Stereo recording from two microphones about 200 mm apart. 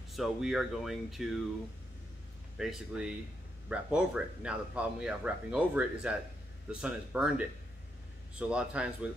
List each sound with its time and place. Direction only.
0.1 s speech: centre (ahead or behind)
2.5 s speech: centre (ahead or behind)